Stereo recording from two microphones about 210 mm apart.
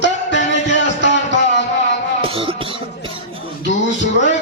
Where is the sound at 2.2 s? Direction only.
25° right (ahead or behind).